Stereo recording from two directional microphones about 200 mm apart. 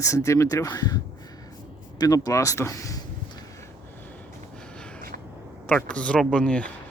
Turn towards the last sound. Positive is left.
turn(degrees=5)  # may be behind; listen again after turning